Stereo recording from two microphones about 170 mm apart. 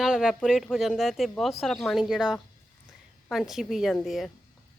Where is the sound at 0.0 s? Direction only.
5° right (ahead or behind).